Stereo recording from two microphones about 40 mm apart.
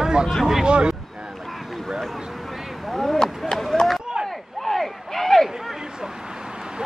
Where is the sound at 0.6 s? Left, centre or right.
Right.